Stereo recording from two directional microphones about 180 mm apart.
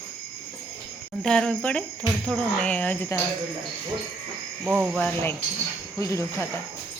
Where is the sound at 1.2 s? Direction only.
5° left (ahead or behind).